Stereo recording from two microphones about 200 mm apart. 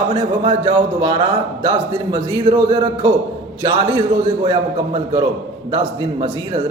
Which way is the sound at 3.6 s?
25° right (ahead or behind).